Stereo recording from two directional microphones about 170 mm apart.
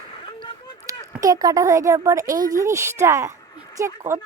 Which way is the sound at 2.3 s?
50° right (ahead or behind).